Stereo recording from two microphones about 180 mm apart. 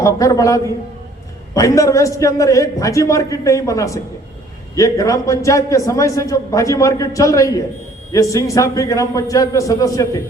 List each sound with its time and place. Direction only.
0.0 s a man's voice: 20° left (ahead or behind)